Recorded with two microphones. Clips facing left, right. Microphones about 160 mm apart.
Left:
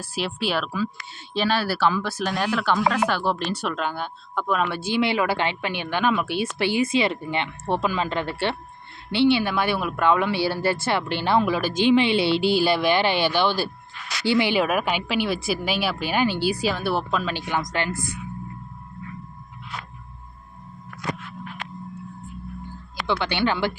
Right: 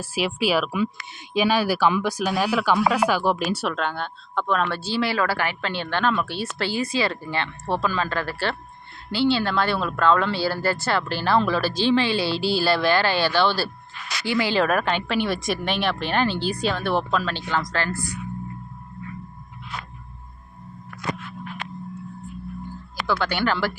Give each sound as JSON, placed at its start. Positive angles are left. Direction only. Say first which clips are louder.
{"t": 0.0, "sound": "speech", "louder": "right 3 dB", "side_deg": -10}
{"t": 3.8, "sound": "speech", "louder": "right 1 dB", "side_deg": 5}
{"t": 4.9, "sound": "speech", "louder": "left 3 dB", "side_deg": 20}
{"t": 14.6, "sound": "speech", "louder": "right 1 dB", "side_deg": 10}
{"t": 23.0, "sound": "speech", "louder": "even", "side_deg": 20}